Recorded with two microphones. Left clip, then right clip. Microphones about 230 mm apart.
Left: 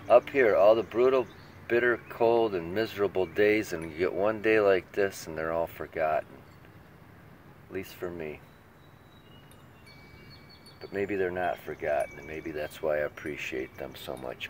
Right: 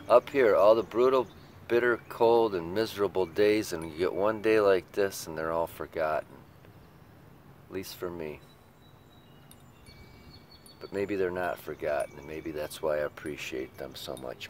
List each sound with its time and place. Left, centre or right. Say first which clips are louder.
0.1 s speech: left 1 dB; centre
7.7 s speech: even; centre
10.8 s speech: even; centre